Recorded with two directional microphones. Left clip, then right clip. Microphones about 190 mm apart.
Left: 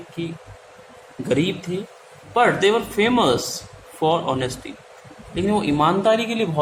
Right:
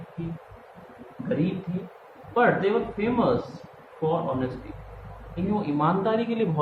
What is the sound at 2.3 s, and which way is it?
Speech, 45° left (ahead or behind).